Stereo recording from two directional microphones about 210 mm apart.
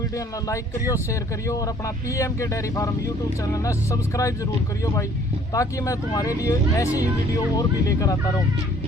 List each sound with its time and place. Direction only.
0.4 s speech: 15° left (ahead or behind)
5.5 s speech: 15° left (ahead or behind)